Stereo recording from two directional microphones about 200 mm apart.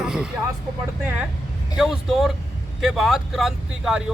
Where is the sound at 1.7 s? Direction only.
Centre (ahead or behind).